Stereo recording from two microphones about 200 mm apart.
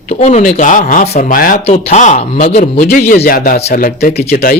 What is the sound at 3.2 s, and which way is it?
Speech, 45° left (ahead or behind).